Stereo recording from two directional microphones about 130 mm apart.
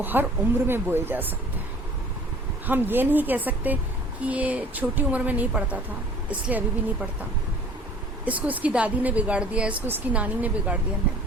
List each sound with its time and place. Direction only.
0.0 s a woman's voice: 15° right (ahead or behind)
2.6 s a woman's voice: 15° right (ahead or behind)
8.2 s a woman's voice: 10° right (ahead or behind)